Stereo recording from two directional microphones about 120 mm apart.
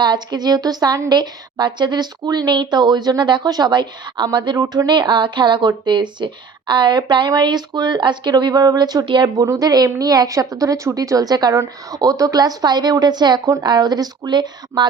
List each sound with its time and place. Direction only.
0.0 s a woman's voice: 35° right (ahead or behind)